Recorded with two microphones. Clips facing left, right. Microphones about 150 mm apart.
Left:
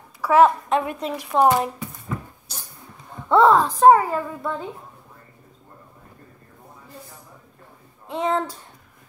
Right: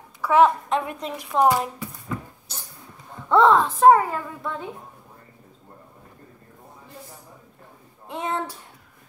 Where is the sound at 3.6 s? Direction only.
35° left (ahead or behind).